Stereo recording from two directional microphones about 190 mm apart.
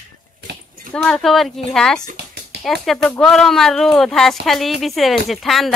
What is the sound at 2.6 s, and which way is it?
Speech, centre (ahead or behind).